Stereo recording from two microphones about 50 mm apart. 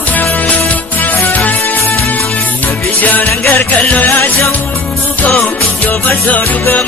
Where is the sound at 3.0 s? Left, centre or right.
Left.